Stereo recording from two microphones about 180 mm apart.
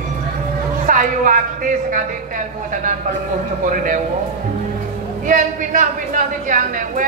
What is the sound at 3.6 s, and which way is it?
Speech, 50° right (ahead or behind).